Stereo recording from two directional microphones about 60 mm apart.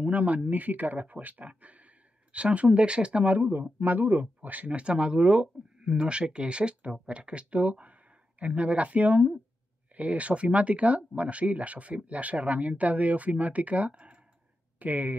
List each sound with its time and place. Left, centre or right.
0.0 s speech: right